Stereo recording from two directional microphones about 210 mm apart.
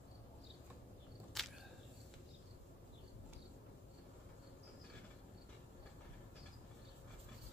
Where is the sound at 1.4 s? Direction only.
Centre (ahead or behind).